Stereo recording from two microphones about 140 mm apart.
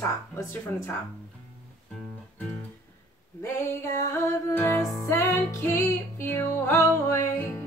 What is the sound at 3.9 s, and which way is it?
Speech, 15° left (ahead or behind).